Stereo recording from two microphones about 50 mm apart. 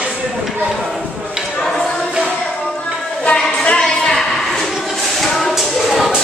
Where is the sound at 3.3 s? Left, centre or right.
Centre.